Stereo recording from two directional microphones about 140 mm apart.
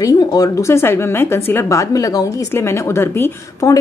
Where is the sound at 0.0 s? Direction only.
25° left (ahead or behind).